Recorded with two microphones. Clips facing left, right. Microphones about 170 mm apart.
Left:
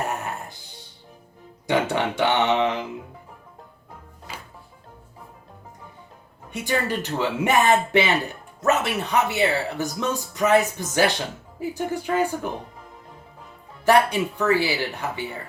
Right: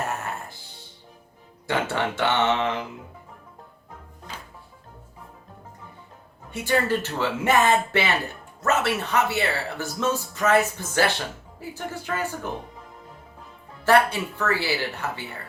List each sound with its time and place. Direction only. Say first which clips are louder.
0.1 s music: left 1 dB; 15° left (ahead or behind)
1.6 s speech: left 3 dB; 15° left (ahead or behind)
6.5 s speech: right 2 dB; 15° left (ahead or behind)
13.8 s speech: left 1 dB; 15° left (ahead or behind)